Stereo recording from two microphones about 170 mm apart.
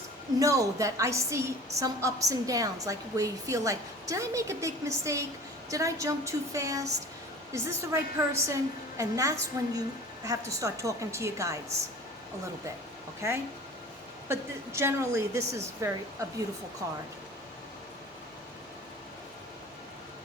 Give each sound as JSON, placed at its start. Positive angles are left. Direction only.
{"t": 0.3, "sound": "a woman's voice", "side_deg": -20}
{"t": 14.3, "sound": "a woman's voice", "side_deg": -15}